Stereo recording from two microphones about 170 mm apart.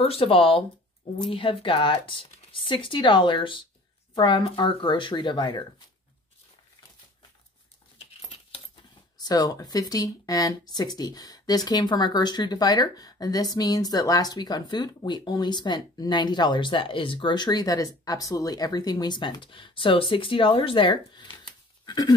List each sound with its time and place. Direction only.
0.0 s speech: 35° left (ahead or behind)
9.2 s speech: 20° left (ahead or behind)